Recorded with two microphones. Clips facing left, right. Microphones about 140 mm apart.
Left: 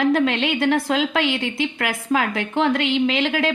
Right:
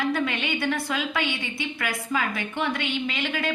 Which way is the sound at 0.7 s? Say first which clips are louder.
Left 7 dB; 75° left (ahead or behind).